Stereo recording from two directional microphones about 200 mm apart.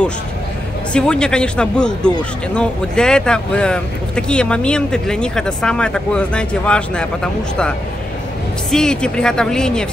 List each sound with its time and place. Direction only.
0.9 s speech: 5° left (ahead or behind)
8.6 s speech: 5° left (ahead or behind)